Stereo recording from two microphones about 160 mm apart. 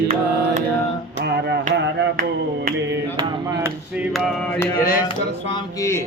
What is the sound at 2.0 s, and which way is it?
Music, 90° right.